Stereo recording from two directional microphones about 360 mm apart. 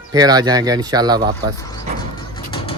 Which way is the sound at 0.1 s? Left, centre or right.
Centre.